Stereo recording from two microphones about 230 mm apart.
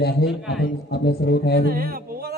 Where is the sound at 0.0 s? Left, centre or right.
Left.